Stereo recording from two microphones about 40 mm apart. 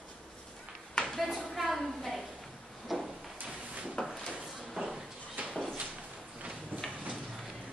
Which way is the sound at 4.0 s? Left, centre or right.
Left.